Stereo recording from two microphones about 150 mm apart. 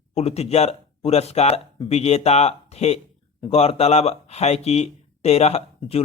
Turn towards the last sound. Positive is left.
turn(degrees=45)  # may be behind; listen again after turning